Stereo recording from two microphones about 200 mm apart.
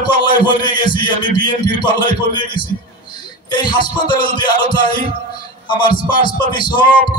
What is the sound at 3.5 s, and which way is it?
A man's voice, 20° left (ahead or behind).